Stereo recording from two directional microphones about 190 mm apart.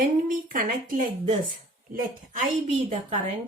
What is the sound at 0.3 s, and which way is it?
Speech, 45° right (ahead or behind).